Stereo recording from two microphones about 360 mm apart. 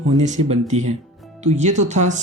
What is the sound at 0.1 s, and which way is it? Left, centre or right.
Speech, centre.